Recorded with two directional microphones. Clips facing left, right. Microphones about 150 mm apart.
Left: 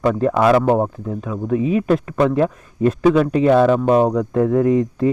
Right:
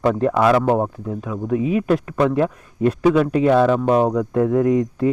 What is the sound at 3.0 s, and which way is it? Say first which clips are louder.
Speech: left 1 dB; 10° right (ahead or behind).